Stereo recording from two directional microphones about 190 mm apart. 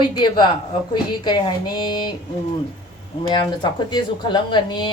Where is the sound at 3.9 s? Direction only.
25° left (ahead or behind).